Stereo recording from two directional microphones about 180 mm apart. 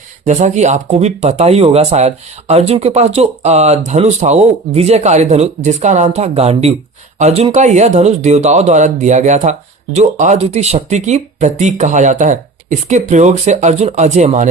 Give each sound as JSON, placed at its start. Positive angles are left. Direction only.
{"t": 0.3, "sound": "speech", "side_deg": -40}